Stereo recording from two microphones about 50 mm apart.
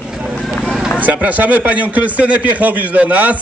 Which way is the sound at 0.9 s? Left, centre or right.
Right.